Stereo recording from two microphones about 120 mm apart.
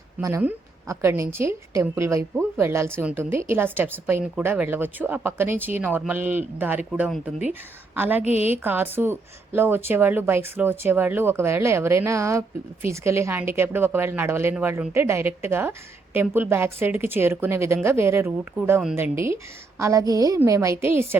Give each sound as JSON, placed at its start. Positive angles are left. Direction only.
{"t": 0.2, "sound": "speech", "side_deg": -25}